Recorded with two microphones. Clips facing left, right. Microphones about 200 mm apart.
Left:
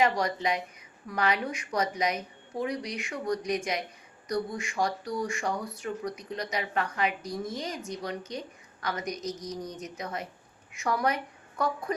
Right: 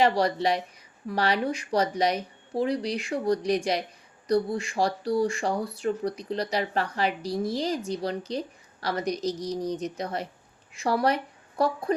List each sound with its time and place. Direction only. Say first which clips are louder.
0.0 s a woman's voice: right 4 dB; 35° right (ahead or behind)